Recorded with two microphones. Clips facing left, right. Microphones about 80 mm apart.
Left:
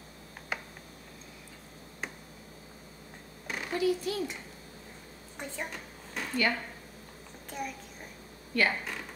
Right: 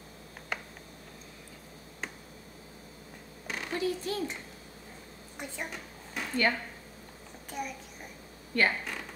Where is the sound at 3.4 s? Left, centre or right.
Centre.